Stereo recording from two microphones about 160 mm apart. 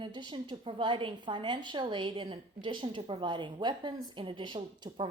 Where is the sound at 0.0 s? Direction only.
30° right (ahead or behind).